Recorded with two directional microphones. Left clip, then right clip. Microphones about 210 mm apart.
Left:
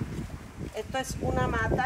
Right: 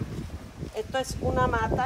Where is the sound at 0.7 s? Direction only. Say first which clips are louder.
Right 3 dB; 50° right (ahead or behind).